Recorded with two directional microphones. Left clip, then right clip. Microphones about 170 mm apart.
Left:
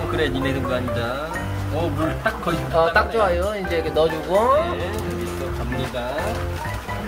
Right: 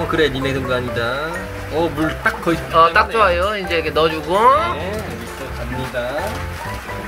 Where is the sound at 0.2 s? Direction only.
35° right (ahead or behind).